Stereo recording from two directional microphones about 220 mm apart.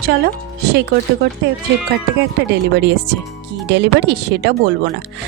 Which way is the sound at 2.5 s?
50° right (ahead or behind).